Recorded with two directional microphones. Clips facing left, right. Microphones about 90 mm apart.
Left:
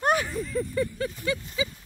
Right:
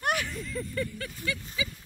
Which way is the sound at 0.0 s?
30° left (ahead or behind).